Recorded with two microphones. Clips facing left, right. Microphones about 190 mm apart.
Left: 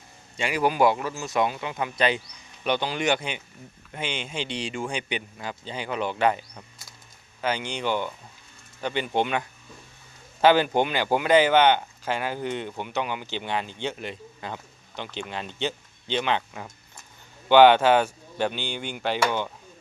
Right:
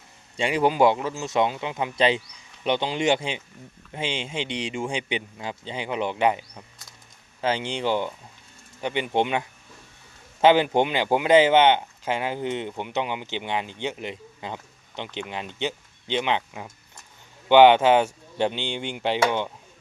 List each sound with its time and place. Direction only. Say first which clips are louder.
0.3 s speech: right 2 dB; 30° right (ahead or behind)
7.4 s speech: right 2 dB; 30° right (ahead or behind)